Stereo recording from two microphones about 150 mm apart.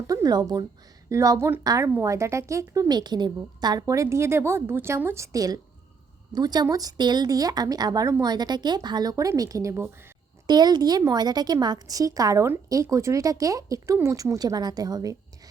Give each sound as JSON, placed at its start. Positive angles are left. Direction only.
{"t": 0.1, "sound": "a woman's voice", "side_deg": -25}